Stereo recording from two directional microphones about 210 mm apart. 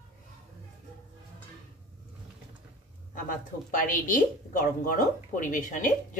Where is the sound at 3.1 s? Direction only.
40° left (ahead or behind).